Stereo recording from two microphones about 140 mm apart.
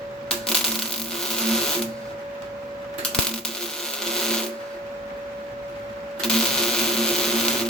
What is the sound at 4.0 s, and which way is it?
Printer, 5° left (ahead or behind).